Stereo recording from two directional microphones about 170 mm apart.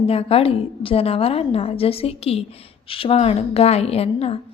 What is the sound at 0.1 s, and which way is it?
A woman's voice, 35° left (ahead or behind).